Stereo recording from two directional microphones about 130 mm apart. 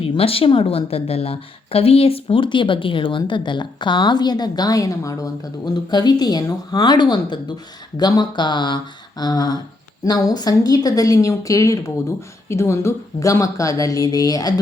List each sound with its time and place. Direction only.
0.0 s a woman's voice: 45° left (ahead or behind); by 14.5 s 30° left (ahead or behind)